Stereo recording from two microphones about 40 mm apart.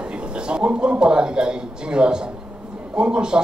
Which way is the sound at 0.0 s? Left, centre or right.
Right.